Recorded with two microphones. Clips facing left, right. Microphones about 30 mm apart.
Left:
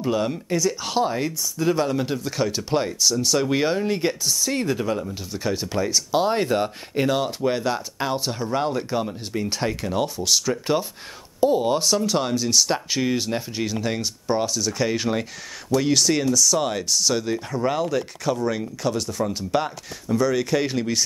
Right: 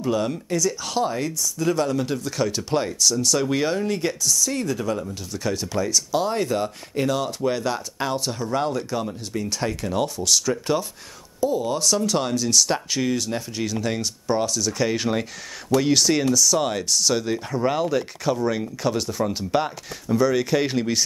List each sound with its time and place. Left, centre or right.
0.0 s speech: centre
11.4 s speech: left
11.9 s speech: centre